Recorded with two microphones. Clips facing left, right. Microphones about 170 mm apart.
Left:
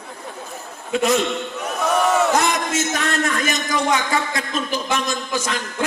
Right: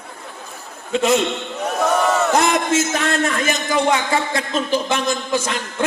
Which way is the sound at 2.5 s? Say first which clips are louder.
Right 4 dB; 30° right (ahead or behind).